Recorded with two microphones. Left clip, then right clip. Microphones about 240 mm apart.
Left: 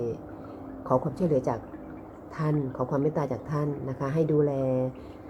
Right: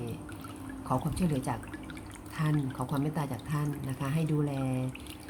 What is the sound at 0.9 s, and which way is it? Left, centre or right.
Speech, centre.